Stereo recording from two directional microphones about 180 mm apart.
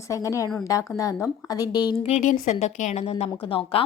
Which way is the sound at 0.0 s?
15° left (ahead or behind).